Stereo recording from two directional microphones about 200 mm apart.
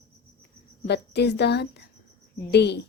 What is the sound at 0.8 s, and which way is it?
A woman's voice, 55° left (ahead or behind).